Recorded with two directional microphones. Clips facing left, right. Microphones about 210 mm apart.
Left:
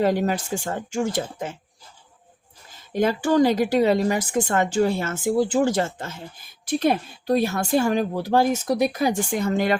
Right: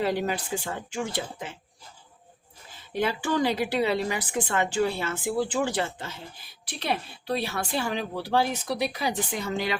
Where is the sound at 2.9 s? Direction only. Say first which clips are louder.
Left 6 dB; 45° left (ahead or behind).